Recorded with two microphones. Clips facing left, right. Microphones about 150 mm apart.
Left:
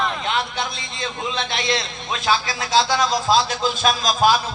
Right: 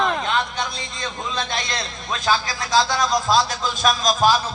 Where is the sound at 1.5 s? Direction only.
40° right (ahead or behind).